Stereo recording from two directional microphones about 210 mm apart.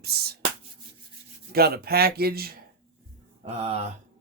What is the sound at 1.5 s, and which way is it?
Speech, 45° right (ahead or behind).